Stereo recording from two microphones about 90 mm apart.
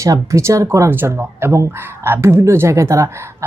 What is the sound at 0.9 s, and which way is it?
A woman's voice, 25° right (ahead or behind).